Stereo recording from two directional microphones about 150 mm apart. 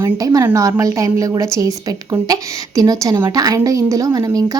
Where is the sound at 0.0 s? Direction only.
25° right (ahead or behind).